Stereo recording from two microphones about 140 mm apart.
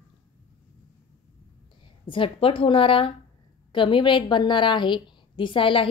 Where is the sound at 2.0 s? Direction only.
40° left (ahead or behind).